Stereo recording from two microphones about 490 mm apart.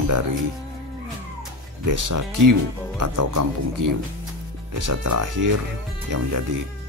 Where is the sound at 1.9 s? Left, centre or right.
Right.